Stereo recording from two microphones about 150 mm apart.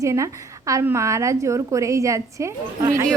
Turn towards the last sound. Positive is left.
turn(degrees=-20)  # may be behind; listen again after turning